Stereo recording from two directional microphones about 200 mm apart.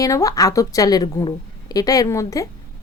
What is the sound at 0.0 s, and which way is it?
A woman's voice, 15° left (ahead or behind).